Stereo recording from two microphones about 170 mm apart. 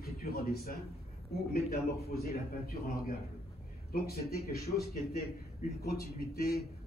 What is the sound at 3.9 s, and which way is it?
A man's voice, 65° left (ahead or behind).